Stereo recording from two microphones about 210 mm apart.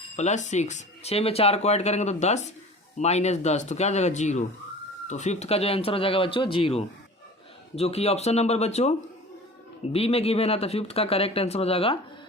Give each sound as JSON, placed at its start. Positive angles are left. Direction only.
{"t": 0.2, "sound": "speech", "side_deg": 35}